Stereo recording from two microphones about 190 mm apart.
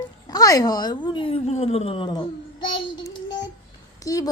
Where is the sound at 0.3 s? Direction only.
20° left (ahead or behind).